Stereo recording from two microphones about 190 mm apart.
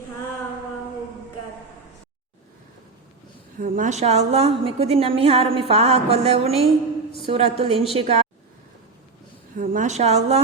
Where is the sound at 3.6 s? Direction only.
45° right (ahead or behind).